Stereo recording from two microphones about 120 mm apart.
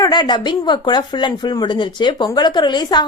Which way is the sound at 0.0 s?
35° left (ahead or behind).